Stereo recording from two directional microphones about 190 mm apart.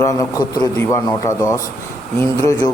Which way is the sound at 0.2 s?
20° left (ahead or behind).